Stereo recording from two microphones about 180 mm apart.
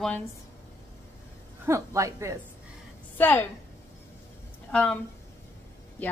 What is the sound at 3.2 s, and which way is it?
Speech, 10° left (ahead or behind).